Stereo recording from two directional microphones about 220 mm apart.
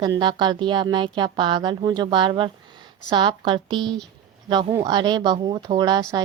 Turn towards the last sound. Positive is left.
turn(degrees=-20)  # may be behind; listen again after turning